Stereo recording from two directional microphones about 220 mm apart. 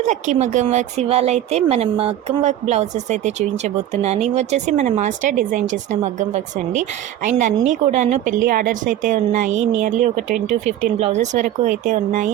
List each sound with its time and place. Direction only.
0.0 s speech: 30° right (ahead or behind)